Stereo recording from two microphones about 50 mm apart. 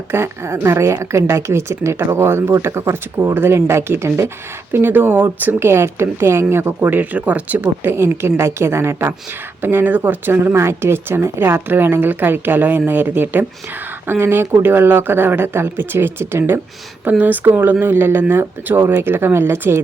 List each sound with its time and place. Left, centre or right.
0.1 s a woman's voice: right
4.7 s a woman's voice: right
5.5 s a woman's voice: right
6.7 s speech: right
7.9 s a woman's voice: right
9.6 s a woman's voice: right
10.5 s a woman's voice: right
17.1 s a woman's voice: right